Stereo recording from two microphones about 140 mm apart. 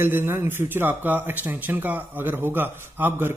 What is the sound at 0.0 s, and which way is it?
A man's voice, 15° right (ahead or behind).